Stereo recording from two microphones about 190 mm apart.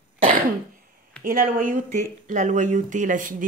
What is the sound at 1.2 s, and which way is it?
Speech, 45° right (ahead or behind).